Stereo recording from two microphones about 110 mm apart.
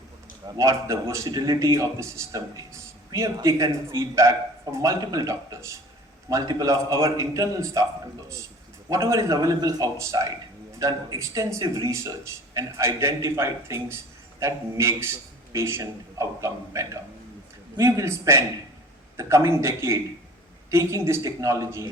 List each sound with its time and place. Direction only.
0.5 s a man's voice: 30° right (ahead or behind)
8.9 s a man's voice: 30° right (ahead or behind)